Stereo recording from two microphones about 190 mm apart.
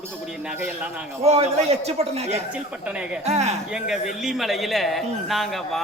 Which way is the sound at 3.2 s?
35° right (ahead or behind).